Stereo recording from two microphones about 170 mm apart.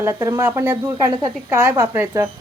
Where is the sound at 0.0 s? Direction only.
15° right (ahead or behind).